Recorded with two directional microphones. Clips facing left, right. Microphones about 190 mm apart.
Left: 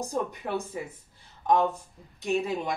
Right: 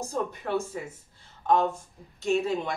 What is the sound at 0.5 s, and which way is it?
Speech, 15° left (ahead or behind).